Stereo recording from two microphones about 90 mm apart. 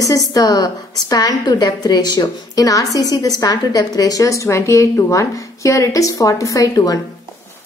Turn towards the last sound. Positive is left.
turn(degrees=40)  # may be behind; listen again after turning